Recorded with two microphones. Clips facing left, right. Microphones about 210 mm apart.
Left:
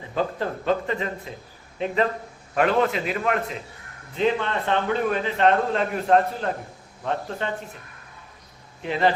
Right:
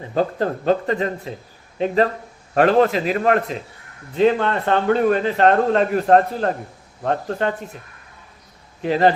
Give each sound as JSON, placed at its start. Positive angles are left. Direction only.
{"t": 0.1, "sound": "a man's voice", "side_deg": -40}
{"t": 2.6, "sound": "a man's voice", "side_deg": -40}
{"t": 8.8, "sound": "a man's voice", "side_deg": -40}